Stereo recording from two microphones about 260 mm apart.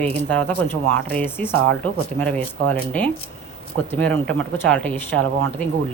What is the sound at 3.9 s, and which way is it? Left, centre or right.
Speech, centre.